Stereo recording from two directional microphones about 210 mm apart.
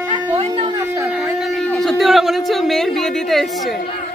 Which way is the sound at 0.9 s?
10° right (ahead or behind).